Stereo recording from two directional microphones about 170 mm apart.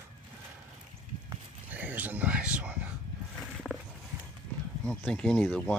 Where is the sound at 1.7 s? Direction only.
10° right (ahead or behind).